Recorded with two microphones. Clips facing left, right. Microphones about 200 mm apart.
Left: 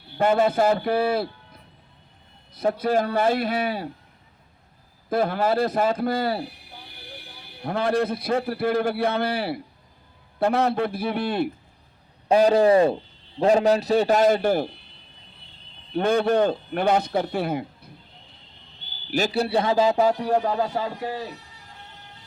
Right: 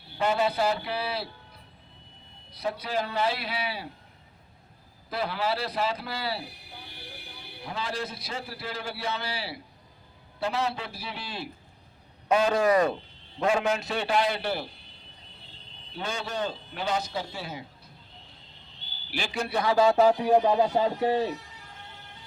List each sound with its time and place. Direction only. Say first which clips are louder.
0.2 s speech: left 6 dB; 50° left (ahead or behind)
2.5 s speech: left 9 dB; 50° left (ahead or behind)
5.0 s speech: left 7 dB; 50° left (ahead or behind)
7.6 s a man's voice: left 11 dB; 55° left (ahead or behind)
12.3 s a man's voice: left 6 dB; 35° left (ahead or behind)
16.0 s a man's voice: left 13 dB; 55° left (ahead or behind)
19.1 s a man's voice: left 8 dB; 40° left (ahead or behind)
19.7 s a sound: right 1 dB; 20° left (ahead or behind)
20.1 s speech: even; 5° right (ahead or behind)
20.3 s speech: right 2 dB; 15° right (ahead or behind)